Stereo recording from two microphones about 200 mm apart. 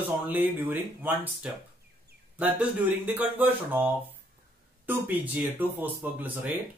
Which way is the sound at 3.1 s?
10° right (ahead or behind).